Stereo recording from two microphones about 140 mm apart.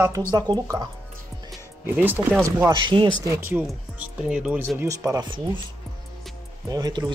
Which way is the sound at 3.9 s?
10° right (ahead or behind).